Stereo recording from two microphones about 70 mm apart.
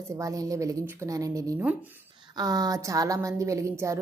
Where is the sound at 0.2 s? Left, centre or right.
Right.